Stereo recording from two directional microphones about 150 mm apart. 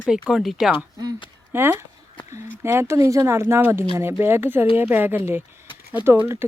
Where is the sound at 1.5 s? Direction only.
15° right (ahead or behind).